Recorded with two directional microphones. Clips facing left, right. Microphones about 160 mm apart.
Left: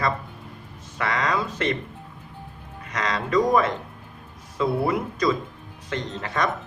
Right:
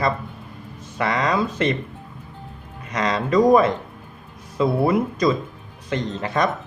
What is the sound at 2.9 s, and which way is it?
A man's voice, 20° right (ahead or behind).